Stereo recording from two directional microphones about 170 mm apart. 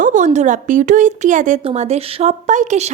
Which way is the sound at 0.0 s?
50° right (ahead or behind).